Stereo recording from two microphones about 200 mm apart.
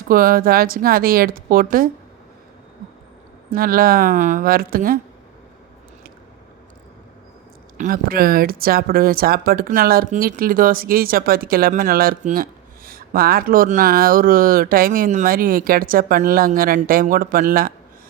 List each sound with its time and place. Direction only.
0.1 s speech: 45° right (ahead or behind)
3.5 s speech: 45° right (ahead or behind)
7.8 s speech: 45° right (ahead or behind)